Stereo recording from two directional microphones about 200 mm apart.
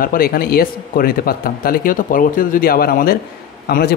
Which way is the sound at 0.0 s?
45° left (ahead or behind).